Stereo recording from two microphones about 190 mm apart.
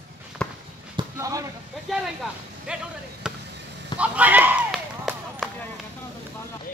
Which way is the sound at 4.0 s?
10° right (ahead or behind).